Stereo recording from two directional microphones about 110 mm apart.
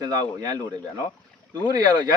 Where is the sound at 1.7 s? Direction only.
40° right (ahead or behind).